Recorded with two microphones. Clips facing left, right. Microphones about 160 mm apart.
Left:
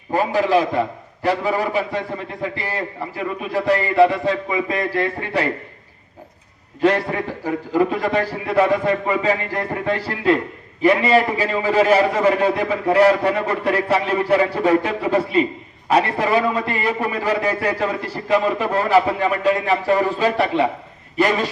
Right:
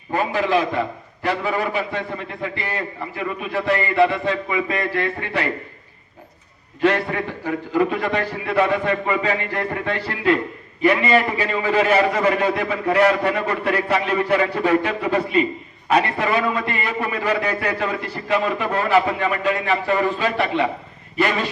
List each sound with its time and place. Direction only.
0.1 s a man's voice: 35° left (ahead or behind)
7.3 s a man's voice: 35° left (ahead or behind)